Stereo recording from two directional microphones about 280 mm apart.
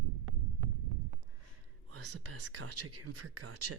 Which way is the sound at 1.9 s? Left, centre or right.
Right.